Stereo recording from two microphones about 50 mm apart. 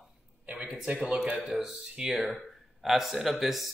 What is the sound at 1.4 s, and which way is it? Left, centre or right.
Speech, centre.